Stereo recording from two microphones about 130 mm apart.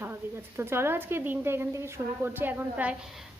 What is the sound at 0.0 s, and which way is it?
A woman's voice, 20° right (ahead or behind).